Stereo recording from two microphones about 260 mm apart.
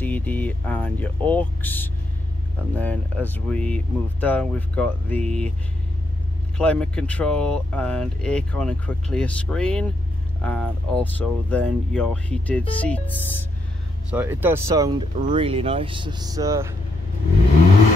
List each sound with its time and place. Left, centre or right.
0.0 s speech: centre
6.6 s speech: centre
14.1 s speech: centre
15.1 s speech: right